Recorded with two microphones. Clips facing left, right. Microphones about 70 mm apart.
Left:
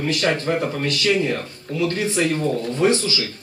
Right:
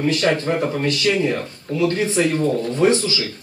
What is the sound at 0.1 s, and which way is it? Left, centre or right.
Speech, right.